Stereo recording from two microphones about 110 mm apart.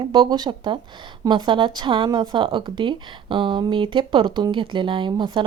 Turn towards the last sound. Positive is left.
turn(degrees=-45)  # may be behind; listen again after turning